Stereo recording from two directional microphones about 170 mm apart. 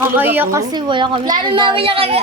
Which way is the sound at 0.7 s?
25° right (ahead or behind).